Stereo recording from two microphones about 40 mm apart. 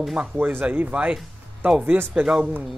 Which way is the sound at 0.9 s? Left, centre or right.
Right.